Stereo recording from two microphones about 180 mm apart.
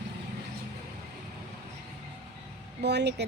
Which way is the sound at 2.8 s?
70° right (ahead or behind).